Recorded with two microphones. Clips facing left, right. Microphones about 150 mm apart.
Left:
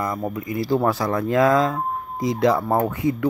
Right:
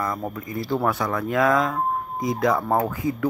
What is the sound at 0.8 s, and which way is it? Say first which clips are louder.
Speech: left 3 dB; 30° left (ahead or behind).